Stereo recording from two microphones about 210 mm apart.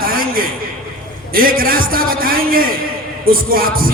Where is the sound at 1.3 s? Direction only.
45° right (ahead or behind).